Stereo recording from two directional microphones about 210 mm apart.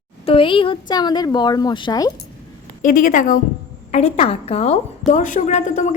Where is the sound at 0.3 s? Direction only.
25° left (ahead or behind).